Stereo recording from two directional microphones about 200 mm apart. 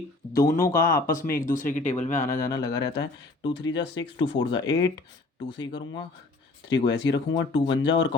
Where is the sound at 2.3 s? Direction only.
50° left (ahead or behind).